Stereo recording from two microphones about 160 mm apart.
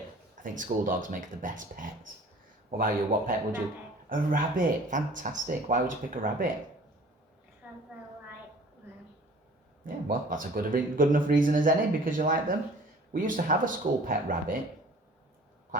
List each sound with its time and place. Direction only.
0.4 s speech: 55° right (ahead or behind)
9.8 s speech: 55° right (ahead or behind)